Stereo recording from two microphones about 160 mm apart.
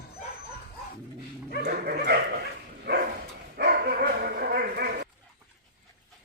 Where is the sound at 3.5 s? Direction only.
80° right.